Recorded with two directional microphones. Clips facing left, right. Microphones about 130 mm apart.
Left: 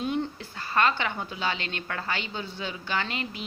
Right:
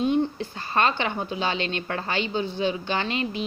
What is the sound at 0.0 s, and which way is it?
A woman's voice, 25° right (ahead or behind).